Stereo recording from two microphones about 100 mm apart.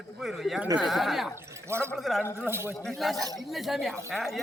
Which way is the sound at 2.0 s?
Centre (ahead or behind).